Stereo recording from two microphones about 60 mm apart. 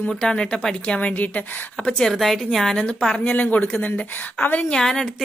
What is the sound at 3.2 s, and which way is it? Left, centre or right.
A woman's voice, left.